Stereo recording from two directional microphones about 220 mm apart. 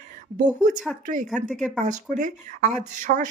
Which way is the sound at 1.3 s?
5° right (ahead or behind).